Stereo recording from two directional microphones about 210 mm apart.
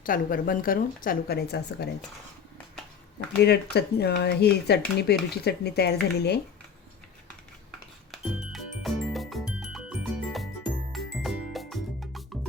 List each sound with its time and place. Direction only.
0.0 s speech: 40° left (ahead or behind)
3.4 s speech: 50° left (ahead or behind)
8.1 s music: centre (ahead or behind)